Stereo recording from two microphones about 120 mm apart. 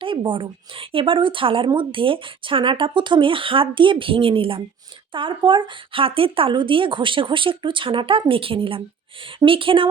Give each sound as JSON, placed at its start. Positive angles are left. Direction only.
{"t": 0.0, "sound": "speech", "side_deg": -45}